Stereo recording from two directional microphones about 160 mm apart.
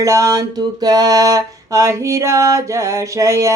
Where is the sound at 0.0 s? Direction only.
20° right (ahead or behind).